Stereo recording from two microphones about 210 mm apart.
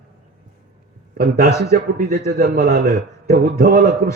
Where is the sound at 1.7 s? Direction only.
45° right (ahead or behind).